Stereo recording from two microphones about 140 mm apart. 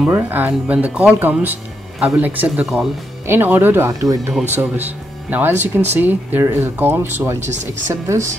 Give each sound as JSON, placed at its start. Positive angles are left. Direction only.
{"t": 0.0, "sound": "speech", "side_deg": -10}
{"t": 3.3, "sound": "speech", "side_deg": -15}
{"t": 7.4, "sound": "speech", "side_deg": -60}
{"t": 7.9, "sound": "a woman's voice", "side_deg": -20}